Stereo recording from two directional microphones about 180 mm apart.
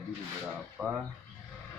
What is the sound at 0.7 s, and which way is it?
Speech, 5° right (ahead or behind).